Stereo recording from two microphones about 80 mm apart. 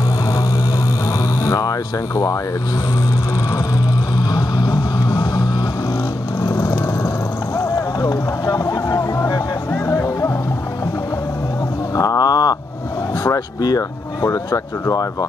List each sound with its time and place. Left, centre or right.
1.4 s a sound: left
4.2 s music: left
7.5 s vehicle: left
9.7 s music: left
11.9 s a sound: left
13.6 s speech: left